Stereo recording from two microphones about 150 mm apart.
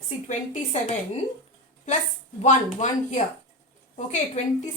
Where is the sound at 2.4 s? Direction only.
55° left (ahead or behind).